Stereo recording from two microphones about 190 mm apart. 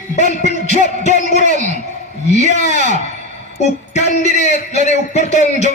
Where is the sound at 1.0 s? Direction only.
35° left (ahead or behind).